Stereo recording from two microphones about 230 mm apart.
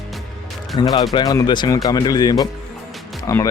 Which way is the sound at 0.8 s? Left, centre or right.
Centre.